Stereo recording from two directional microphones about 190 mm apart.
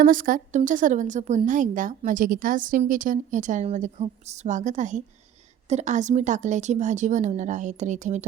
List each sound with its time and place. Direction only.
0.0 s a woman's voice: 45° right (ahead or behind)